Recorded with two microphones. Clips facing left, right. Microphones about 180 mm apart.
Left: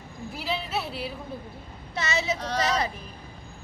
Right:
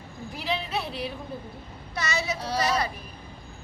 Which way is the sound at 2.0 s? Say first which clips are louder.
Left 2 dB; 25° left (ahead or behind).